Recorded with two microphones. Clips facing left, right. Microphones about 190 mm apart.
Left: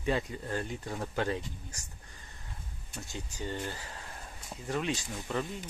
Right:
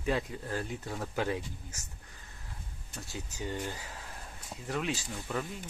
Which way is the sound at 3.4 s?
10° right (ahead or behind).